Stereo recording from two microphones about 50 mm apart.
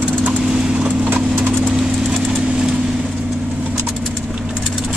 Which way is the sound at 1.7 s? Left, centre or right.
Centre.